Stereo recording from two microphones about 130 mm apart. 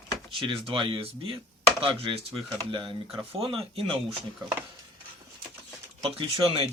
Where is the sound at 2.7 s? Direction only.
40° right (ahead or behind).